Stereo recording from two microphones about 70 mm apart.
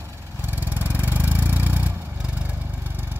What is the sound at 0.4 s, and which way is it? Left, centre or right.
Vehicle, right.